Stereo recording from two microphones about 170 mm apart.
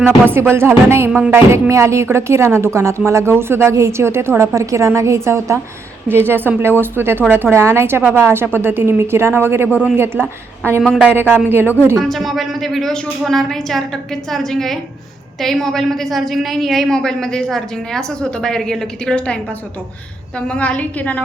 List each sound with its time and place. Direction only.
0.0 s speech: 15° right (ahead or behind)
11.9 s a woman's voice: centre (ahead or behind)
20.5 s a woman's voice: 10° left (ahead or behind)